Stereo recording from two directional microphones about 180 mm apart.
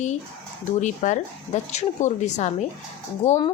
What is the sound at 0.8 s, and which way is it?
A woman's voice, 40° left (ahead or behind).